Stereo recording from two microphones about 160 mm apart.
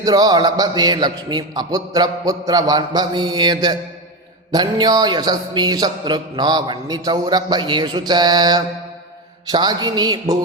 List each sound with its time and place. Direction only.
0.0 s speech: 25° right (ahead or behind)